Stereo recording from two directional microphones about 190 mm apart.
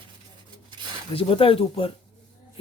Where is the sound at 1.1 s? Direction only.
30° left (ahead or behind).